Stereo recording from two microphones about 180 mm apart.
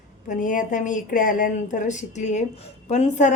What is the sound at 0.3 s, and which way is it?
A woman's voice, 45° left (ahead or behind).